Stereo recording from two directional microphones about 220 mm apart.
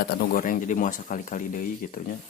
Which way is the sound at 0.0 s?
45° left (ahead or behind).